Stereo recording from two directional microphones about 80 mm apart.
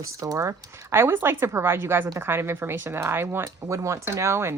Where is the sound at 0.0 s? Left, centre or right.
Right.